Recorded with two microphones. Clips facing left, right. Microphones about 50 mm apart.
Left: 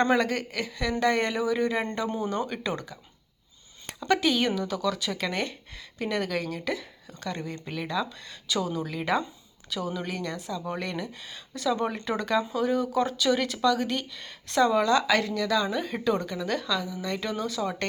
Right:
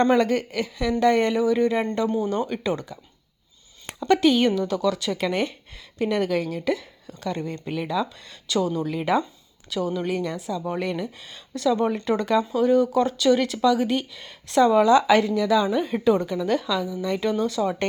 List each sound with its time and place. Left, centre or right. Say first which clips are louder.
0.0 s speech: right 4 dB; centre
2.0 s speech: right 6 dB; centre
2.5 s speech: right 5 dB; centre
4.0 s a woman's voice: right 6 dB; centre